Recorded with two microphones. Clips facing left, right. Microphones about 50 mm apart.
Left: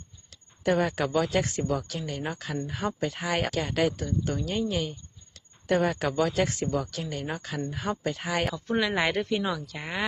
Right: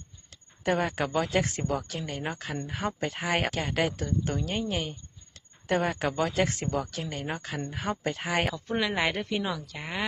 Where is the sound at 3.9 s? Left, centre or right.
Right.